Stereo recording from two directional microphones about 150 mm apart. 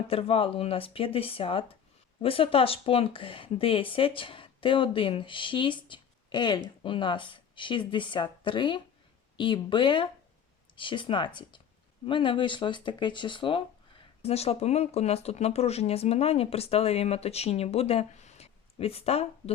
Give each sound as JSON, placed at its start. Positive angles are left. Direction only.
{"t": 0.1, "sound": "speech", "side_deg": 40}